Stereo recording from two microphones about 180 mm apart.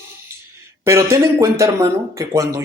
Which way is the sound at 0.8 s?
15° right (ahead or behind).